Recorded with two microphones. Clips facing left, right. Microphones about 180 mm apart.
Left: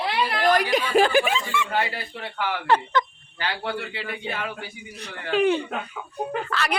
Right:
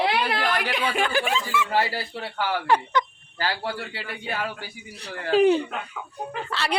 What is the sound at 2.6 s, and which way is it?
Speech, 15° right (ahead or behind).